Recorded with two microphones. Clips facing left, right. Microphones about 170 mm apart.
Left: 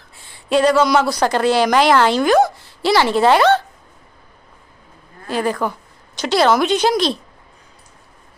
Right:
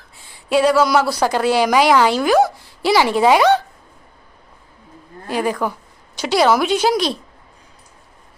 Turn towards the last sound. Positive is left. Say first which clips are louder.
# left 1 dB
turn(degrees=-10)  # may be behind; listen again after turning